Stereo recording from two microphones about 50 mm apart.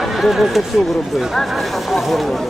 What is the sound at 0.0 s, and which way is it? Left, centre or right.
Speech, centre.